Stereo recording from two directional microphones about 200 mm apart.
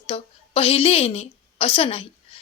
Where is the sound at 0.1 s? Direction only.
30° left (ahead or behind).